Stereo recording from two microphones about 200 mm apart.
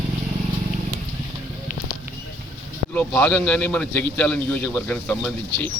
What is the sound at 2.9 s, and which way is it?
A man's voice, 5° left (ahead or behind).